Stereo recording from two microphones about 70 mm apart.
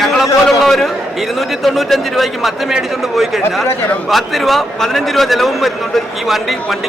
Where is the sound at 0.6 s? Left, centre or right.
Centre.